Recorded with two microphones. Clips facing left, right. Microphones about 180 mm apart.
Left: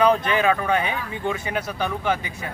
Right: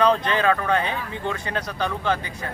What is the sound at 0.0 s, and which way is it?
Speech, 10° left (ahead or behind).